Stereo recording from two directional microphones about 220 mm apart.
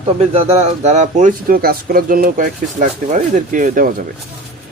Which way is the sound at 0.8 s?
30° right (ahead or behind).